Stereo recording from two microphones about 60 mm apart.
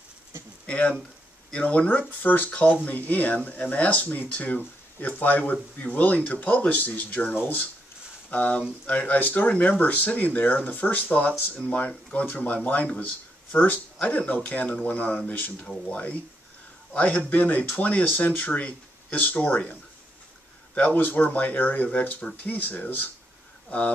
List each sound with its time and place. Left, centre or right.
0.7 s speech: left